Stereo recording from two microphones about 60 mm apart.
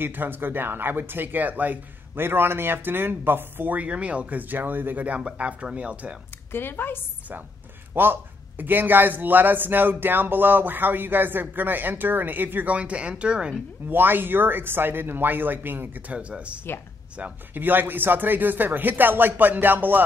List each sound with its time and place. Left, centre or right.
0.0 s speech: right
6.5 s a woman's voice: left
7.9 s speech: right
12.7 s speech: right
13.8 s speech: right
17.2 s speech: right